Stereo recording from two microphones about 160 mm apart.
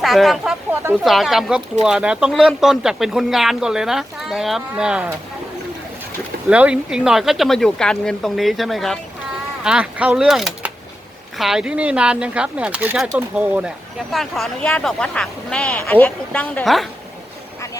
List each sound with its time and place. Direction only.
0.0 s speech: centre (ahead or behind)
0.7 s a sound: 15° right (ahead or behind)
1.0 s speech: centre (ahead or behind)
6.5 s a woman's voice: 5° right (ahead or behind)